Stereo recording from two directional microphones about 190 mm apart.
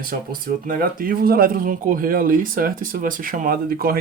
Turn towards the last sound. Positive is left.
turn(degrees=-50)  # may be behind; listen again after turning